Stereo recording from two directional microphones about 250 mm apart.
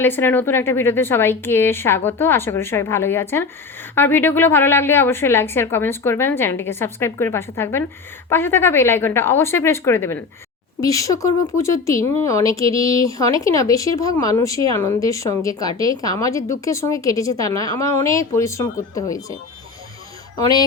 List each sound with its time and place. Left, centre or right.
0.0 s speech: centre